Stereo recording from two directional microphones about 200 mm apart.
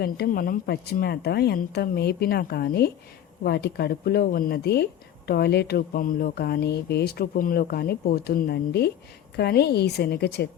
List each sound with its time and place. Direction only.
0.0 s a woman's voice: 50° left (ahead or behind)